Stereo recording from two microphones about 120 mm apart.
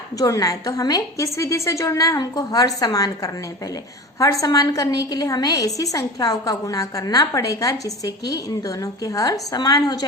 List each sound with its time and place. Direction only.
0.2 s a woman's voice: 30° left (ahead or behind)
4.2 s a woman's voice: 30° left (ahead or behind)